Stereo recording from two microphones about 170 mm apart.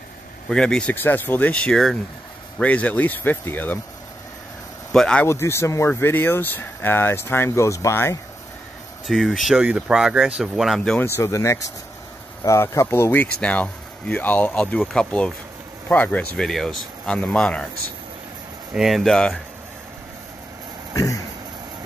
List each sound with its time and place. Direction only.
0.5 s speech: 5° left (ahead or behind)
4.9 s speech: 5° left (ahead or behind)
9.0 s speech: centre (ahead or behind)
11.1 s speech: 15° left (ahead or behind)
18.7 s speech: centre (ahead or behind)
20.9 s a sound: 20° left (ahead or behind)